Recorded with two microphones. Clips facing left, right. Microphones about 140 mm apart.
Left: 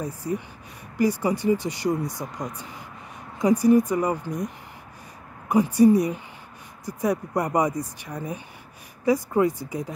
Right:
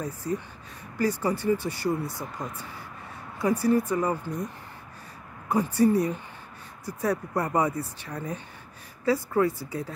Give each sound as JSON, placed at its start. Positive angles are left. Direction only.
{"t": 0.0, "sound": "speech", "side_deg": 10}
{"t": 5.5, "sound": "speech", "side_deg": 15}